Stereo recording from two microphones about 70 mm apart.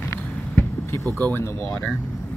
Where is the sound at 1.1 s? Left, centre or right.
Left.